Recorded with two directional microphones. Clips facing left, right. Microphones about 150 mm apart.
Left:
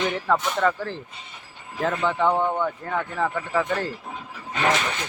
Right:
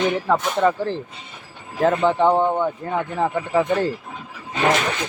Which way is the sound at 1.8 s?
35° right (ahead or behind).